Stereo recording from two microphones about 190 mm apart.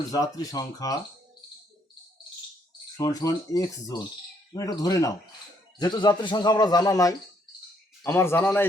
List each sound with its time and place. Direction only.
0.1 s a man's voice: 20° left (ahead or behind)
2.9 s a man's voice: 20° left (ahead or behind)